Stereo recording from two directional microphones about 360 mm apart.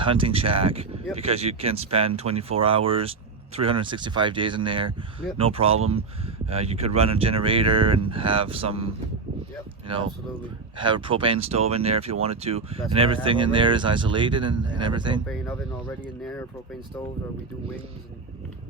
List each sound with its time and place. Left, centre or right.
0.0 s speech: centre